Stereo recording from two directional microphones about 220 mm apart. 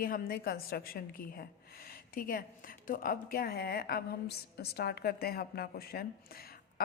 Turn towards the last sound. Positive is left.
turn(degrees=45)  # may be behind; listen again after turning